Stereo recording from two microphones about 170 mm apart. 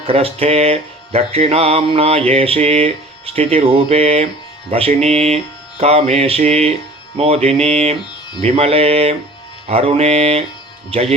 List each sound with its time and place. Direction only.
0.1 s mantra: 35° right (ahead or behind)